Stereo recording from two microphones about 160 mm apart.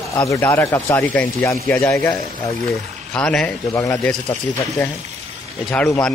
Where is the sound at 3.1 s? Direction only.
5° left (ahead or behind).